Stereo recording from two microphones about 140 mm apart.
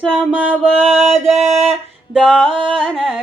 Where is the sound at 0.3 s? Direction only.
5° left (ahead or behind).